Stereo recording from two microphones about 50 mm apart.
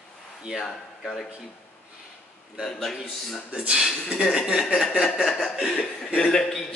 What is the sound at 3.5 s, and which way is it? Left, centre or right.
A man's voice, right.